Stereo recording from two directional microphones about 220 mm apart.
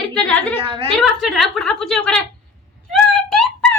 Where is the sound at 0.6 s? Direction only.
20° right (ahead or behind).